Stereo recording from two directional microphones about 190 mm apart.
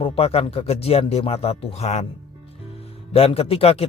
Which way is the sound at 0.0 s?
30° left (ahead or behind).